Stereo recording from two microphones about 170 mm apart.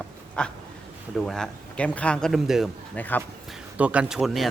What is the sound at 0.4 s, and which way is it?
Speech, 5° left (ahead or behind).